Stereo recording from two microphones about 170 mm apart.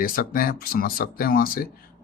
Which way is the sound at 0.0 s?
60° left (ahead or behind).